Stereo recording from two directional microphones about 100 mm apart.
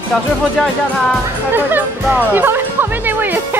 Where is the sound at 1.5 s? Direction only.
20° right (ahead or behind).